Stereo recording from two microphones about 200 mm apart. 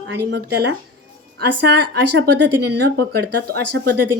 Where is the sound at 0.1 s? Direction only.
60° right (ahead or behind).